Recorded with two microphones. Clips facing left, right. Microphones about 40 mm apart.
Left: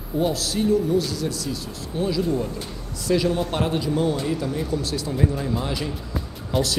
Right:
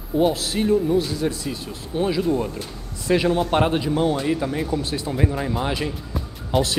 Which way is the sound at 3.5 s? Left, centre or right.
Right.